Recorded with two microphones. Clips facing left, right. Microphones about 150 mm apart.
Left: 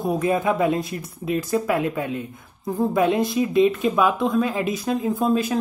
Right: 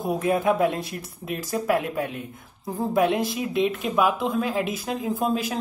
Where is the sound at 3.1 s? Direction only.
5° right (ahead or behind).